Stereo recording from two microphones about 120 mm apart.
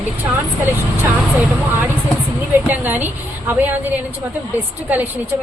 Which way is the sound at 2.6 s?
15° right (ahead or behind).